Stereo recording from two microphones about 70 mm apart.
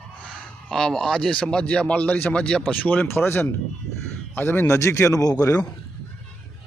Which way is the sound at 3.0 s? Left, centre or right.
Left.